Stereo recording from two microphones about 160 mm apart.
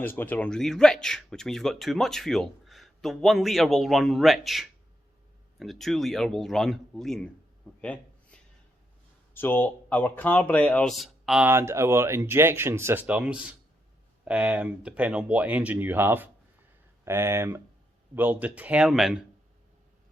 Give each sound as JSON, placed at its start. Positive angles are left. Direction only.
{"t": 0.0, "sound": "speech", "side_deg": 10}
{"t": 7.8, "sound": "a sound", "side_deg": 5}
{"t": 9.3, "sound": "speech", "side_deg": 10}